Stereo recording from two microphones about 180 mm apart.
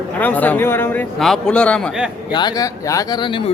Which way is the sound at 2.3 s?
20° left (ahead or behind).